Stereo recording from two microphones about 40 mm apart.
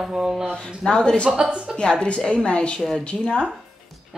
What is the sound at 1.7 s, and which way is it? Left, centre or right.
A woman's voice, left.